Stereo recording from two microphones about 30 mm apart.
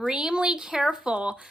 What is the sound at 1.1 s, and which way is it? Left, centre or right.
Speech, right.